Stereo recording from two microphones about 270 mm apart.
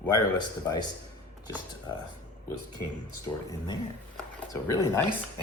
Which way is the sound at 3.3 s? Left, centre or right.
Centre.